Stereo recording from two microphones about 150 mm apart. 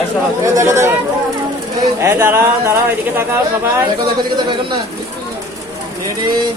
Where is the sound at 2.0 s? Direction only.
15° right (ahead or behind).